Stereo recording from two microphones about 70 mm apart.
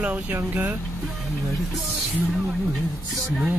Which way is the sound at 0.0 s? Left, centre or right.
Right.